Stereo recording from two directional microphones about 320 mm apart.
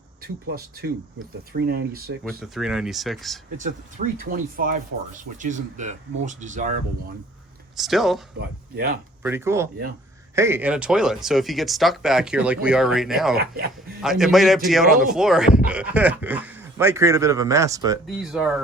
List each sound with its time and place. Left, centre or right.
0.2 s speech: right
2.2 s speech: centre
3.6 s speech: right
7.8 s speech: centre
8.4 s speech: right
9.2 s speech: centre
13.3 s speech: right
14.0 s speech: centre